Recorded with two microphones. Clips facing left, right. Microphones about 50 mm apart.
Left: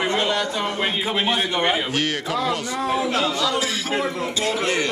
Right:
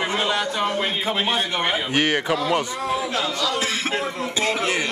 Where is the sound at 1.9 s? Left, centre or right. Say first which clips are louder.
Right 3 dB; centre.